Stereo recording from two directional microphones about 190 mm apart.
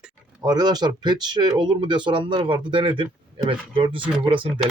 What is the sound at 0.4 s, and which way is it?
Speech, 20° right (ahead or behind).